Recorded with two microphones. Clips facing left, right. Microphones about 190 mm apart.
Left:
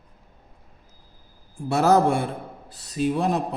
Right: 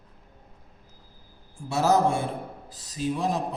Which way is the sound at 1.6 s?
60° left (ahead or behind).